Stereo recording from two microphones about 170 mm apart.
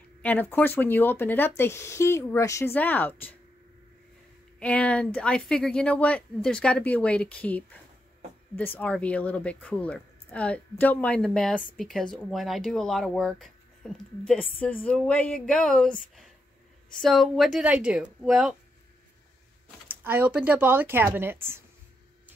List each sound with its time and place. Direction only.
0.2 s speech: 10° left (ahead or behind)
4.6 s speech: 5° left (ahead or behind)
19.9 s speech: 10° right (ahead or behind)